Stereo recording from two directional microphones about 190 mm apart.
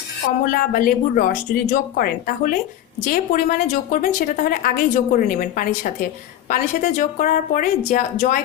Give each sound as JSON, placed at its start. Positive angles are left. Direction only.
{"t": 0.5, "sound": "a woman's voice", "side_deg": 50}